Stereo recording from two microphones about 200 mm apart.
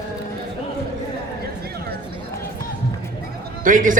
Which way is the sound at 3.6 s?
40° right (ahead or behind).